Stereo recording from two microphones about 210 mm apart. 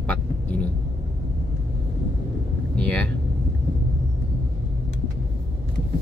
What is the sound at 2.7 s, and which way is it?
Vehicle, 5° left (ahead or behind).